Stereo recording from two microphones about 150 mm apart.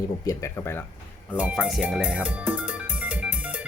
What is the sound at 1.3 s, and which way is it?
Speech, 10° right (ahead or behind).